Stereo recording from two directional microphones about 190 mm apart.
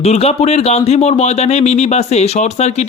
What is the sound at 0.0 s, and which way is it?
Speech, 35° left (ahead or behind).